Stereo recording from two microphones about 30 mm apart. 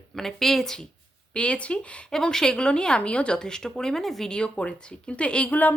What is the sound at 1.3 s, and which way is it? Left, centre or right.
Speech, left.